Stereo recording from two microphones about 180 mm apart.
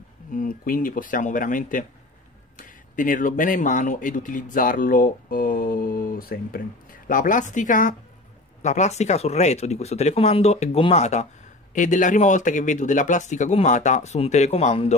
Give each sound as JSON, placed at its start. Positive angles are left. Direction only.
{"t": 0.3, "sound": "speech", "side_deg": 50}